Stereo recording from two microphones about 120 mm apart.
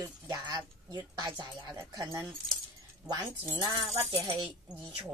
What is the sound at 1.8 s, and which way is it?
Speech, 30° right (ahead or behind).